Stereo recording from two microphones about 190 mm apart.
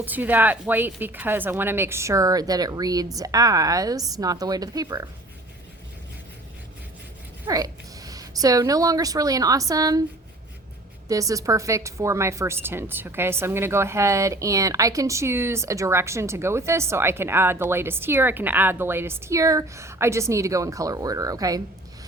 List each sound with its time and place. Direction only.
0.0 s speech: 10° right (ahead or behind)
7.4 s a woman's voice: 20° right (ahead or behind)
11.1 s speech: 20° right (ahead or behind)